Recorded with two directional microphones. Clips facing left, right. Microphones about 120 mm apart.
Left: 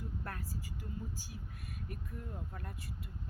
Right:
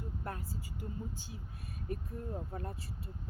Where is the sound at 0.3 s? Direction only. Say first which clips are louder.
Right 2 dB; 25° right (ahead or behind).